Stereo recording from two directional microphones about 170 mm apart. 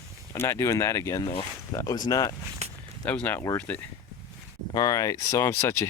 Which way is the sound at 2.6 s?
40° right (ahead or behind).